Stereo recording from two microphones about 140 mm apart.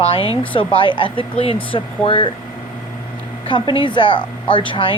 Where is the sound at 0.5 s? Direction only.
35° left (ahead or behind).